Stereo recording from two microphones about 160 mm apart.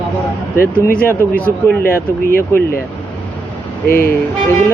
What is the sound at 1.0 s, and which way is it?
Speech, 10° left (ahead or behind).